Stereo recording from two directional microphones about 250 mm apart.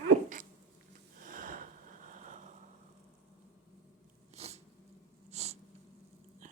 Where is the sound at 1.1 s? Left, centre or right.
Right.